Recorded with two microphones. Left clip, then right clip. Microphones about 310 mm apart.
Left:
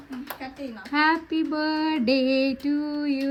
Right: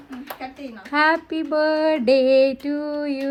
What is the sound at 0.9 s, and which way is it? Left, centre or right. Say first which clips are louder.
Child singing: right 4 dB; centre.